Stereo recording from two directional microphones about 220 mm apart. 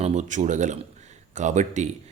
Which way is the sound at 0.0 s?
30° right (ahead or behind).